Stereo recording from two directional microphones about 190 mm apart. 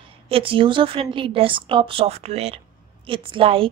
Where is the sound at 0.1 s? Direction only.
30° right (ahead or behind).